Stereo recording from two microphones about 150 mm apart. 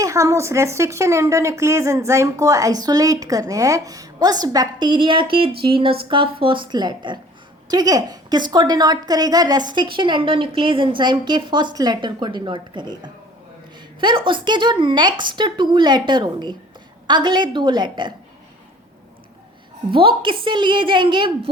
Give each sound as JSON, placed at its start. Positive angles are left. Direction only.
{"t": 0.0, "sound": "a woman's voice", "side_deg": -20}
{"t": 19.9, "sound": "speech", "side_deg": -35}